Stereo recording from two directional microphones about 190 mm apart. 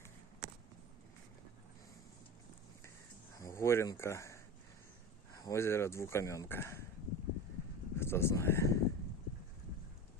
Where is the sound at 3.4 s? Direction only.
15° left (ahead or behind).